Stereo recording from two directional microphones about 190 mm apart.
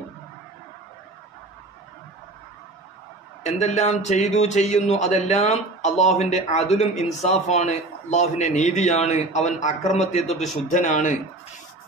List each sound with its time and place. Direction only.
3.4 s speech: 35° left (ahead or behind)